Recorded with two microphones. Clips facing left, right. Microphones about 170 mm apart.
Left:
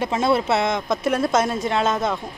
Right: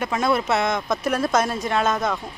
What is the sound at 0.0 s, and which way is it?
Speech, 25° left (ahead or behind).